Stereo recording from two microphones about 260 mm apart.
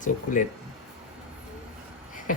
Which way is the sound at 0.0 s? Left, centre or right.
Left.